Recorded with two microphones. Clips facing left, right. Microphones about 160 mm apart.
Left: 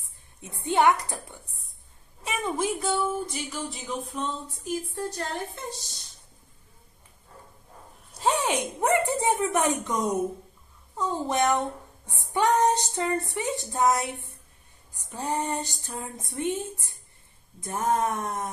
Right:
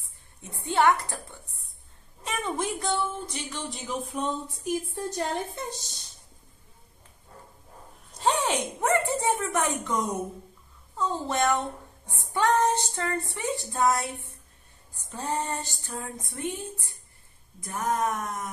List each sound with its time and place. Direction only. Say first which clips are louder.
0.4 s female singing: left 1 dB; 20° left (ahead or behind)
2.2 s speech: left 2 dB; 5° left (ahead or behind)
4.1 s a woman's voice: right 2 dB; 10° right (ahead or behind)
8.1 s a woman's voice: even; 10° left (ahead or behind)
11.0 s female singing: left 1 dB; 15° left (ahead or behind)
15.0 s speech: left 1 dB; 15° left (ahead or behind)